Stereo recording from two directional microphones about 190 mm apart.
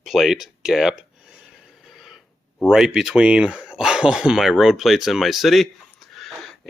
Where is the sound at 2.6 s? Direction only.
5° right (ahead or behind).